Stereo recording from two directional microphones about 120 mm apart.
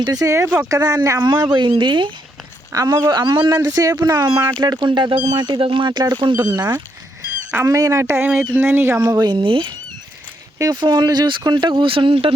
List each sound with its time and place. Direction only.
0.0 s speech: 30° right (ahead or behind)
1.4 s speech: 35° right (ahead or behind)
2.7 s speech: 30° right (ahead or behind)
7.5 s speech: 25° right (ahead or behind)
9.0 s speech: 30° right (ahead or behind)
9.3 s speech: 45° right (ahead or behind)
10.6 s speech: 35° right (ahead or behind)